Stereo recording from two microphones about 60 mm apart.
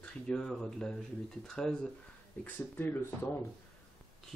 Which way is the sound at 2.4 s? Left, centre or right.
Left.